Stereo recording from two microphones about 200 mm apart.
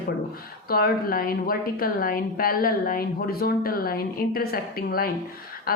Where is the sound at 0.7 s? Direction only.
50° left (ahead or behind).